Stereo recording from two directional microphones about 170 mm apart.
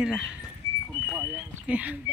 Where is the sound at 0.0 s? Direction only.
5° right (ahead or behind).